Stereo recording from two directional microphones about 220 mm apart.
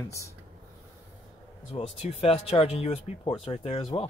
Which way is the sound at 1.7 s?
25° left (ahead or behind).